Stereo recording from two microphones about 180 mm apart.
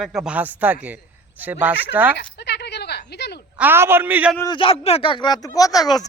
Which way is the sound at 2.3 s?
70° left (ahead or behind).